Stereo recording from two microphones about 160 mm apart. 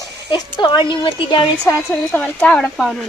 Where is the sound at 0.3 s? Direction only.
25° left (ahead or behind).